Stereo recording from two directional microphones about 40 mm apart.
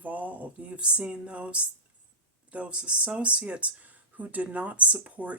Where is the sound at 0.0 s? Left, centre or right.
Right.